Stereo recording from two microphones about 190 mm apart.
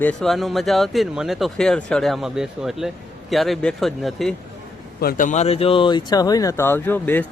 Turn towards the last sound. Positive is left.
turn(degrees=10)  # may be behind; listen again after turning